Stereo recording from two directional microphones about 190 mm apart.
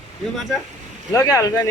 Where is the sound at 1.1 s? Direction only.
15° left (ahead or behind).